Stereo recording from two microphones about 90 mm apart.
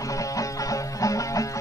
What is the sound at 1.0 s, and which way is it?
Music, 40° left (ahead or behind).